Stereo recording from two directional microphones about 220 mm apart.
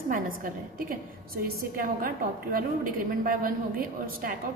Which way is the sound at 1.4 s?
40° right (ahead or behind).